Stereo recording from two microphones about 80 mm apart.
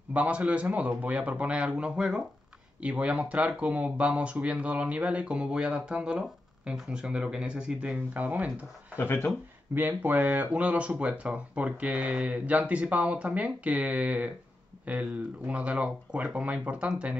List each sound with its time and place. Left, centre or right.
0.1 s speech: centre
8.9 s speech: left
9.8 s speech: right